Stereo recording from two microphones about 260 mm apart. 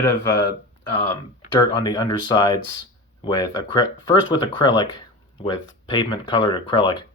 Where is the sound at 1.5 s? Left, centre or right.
Centre.